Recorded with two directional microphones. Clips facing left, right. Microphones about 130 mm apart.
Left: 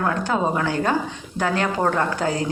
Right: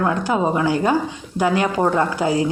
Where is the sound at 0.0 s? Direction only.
15° right (ahead or behind).